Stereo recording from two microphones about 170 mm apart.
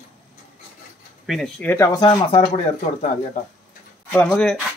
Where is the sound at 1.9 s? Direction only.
30° left (ahead or behind).